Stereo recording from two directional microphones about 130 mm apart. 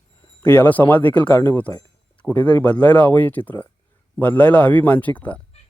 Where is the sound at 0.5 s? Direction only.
15° left (ahead or behind).